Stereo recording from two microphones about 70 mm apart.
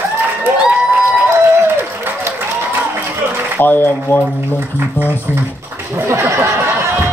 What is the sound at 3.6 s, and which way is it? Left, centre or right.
Speech, left.